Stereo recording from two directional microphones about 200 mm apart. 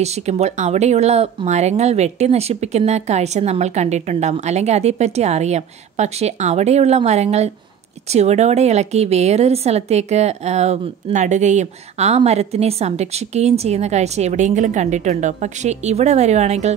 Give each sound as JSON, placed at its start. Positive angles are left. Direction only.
{"t": 0.0, "sound": "a woman's voice", "side_deg": -35}